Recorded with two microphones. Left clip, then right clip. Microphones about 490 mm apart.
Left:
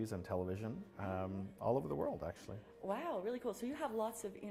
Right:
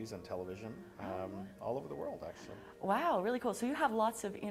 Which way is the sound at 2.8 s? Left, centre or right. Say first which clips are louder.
Right 8 dB; right.